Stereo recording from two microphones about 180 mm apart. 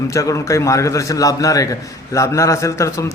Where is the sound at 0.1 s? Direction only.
15° left (ahead or behind).